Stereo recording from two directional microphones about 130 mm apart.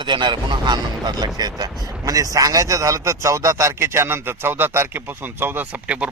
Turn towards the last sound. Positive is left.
turn(degrees=-10)  # may be behind; listen again after turning